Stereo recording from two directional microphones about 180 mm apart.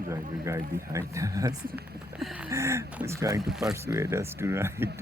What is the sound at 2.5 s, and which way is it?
Speech, 15° right (ahead or behind).